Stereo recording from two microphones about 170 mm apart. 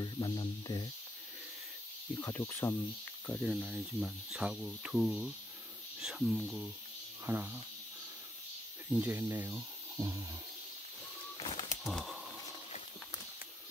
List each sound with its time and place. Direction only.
0.0 s speech: 25° left (ahead or behind)
2.1 s speech: 15° left (ahead or behind)
3.3 s speech: centre (ahead or behind)
8.9 s speech: 10° right (ahead or behind)
11.3 s a sound: 30° left (ahead or behind)
11.8 s a sound: centre (ahead or behind)